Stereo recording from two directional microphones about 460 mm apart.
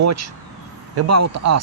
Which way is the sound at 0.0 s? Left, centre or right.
Right.